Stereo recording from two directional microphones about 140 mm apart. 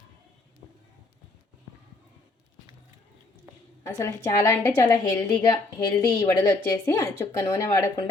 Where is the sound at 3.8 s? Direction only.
20° left (ahead or behind).